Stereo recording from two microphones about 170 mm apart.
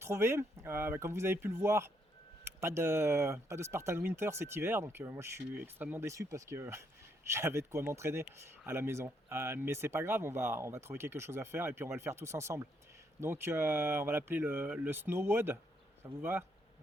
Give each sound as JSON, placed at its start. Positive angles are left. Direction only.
{"t": 0.0, "sound": "speech", "side_deg": -15}